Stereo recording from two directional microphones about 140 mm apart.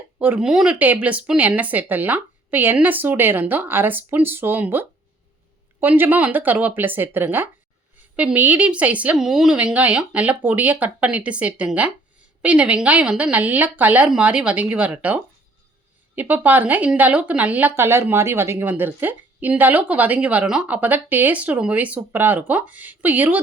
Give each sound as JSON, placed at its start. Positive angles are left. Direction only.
{"t": 0.2, "sound": "speech", "side_deg": -10}